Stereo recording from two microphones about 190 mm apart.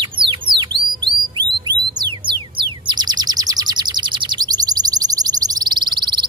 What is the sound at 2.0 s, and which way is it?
Music, 25° right (ahead or behind).